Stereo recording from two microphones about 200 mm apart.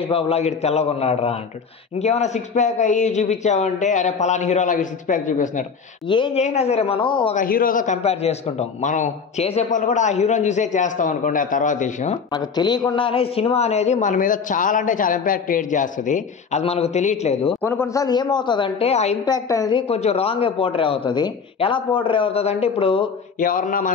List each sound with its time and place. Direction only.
0.0 s a man's voice: 30° left (ahead or behind)
6.0 s a woman's voice: 25° left (ahead or behind)
7.3 s a man's voice: 45° left (ahead or behind)
12.3 s a man's voice: 20° left (ahead or behind)
17.6 s a woman's voice: 10° left (ahead or behind); by 19.1 s 30° left (ahead or behind)
19.2 s a woman's voice: 20° left (ahead or behind)
23.4 s speech: 45° left (ahead or behind)